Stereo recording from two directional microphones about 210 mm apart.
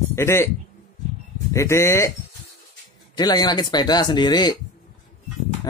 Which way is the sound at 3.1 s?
20° left (ahead or behind).